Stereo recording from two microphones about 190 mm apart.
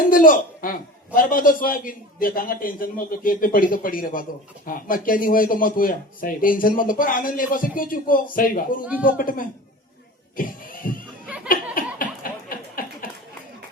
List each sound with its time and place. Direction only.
0.1 s a man's voice: 45° left (ahead or behind)
11.4 s laughter: 45° left (ahead or behind)
11.9 s a sound: 50° left (ahead or behind)